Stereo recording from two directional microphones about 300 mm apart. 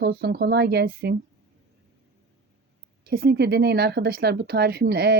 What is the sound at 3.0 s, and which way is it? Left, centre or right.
Speech, right.